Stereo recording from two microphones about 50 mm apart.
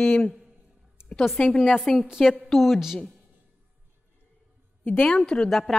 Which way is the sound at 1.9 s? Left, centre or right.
Centre.